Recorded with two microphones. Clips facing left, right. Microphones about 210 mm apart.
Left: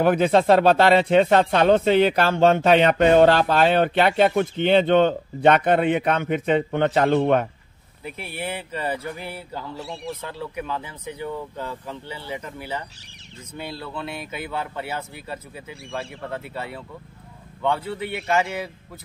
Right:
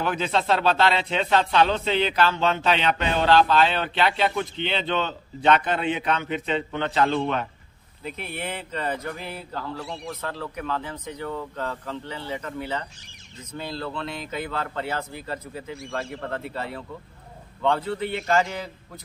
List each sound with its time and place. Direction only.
0.0 s speech: 55° left (ahead or behind)
8.0 s speech: 10° left (ahead or behind)